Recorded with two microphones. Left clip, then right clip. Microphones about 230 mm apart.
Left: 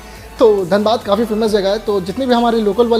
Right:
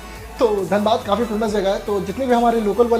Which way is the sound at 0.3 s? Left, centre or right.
Left.